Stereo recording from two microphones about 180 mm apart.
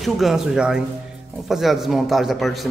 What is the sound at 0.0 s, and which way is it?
A man's voice, centre (ahead or behind).